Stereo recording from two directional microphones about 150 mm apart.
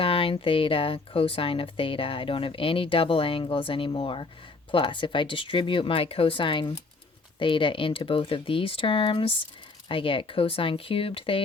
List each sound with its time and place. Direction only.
0.0 s speech: 35° left (ahead or behind)